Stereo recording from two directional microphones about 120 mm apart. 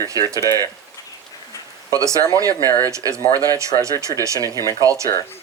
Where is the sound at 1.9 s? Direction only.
25° right (ahead or behind).